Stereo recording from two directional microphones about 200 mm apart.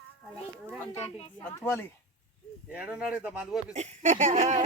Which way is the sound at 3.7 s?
35° right (ahead or behind).